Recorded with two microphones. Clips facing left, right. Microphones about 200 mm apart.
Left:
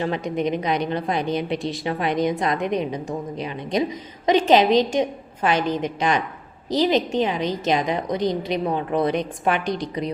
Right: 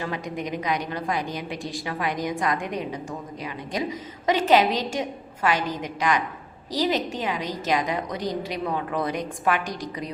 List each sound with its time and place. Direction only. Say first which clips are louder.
0.0 s a woman's voice: left 7 dB; 25° left (ahead or behind)